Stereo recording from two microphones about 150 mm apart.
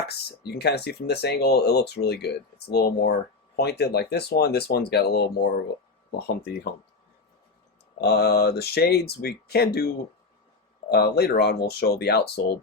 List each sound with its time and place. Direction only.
0.1 s speech: 90° left
8.0 s speech: 90° left
10.8 s speech: 90° left